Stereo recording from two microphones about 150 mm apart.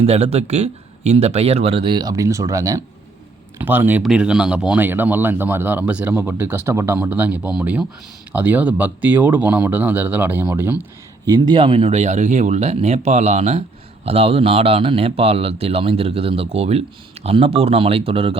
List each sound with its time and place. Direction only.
0.0 s speech: 45° right (ahead or behind); by 10.8 s 15° right (ahead or behind)
11.3 s speech: 30° right (ahead or behind)